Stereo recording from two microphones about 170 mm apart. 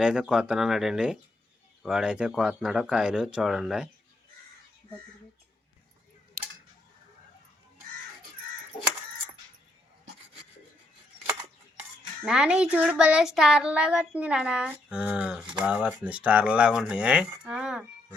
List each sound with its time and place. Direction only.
0.0 s speech: 5° right (ahead or behind)
11.3 s cutlery: 30° right (ahead or behind)
12.2 s speech: 5° right (ahead or behind)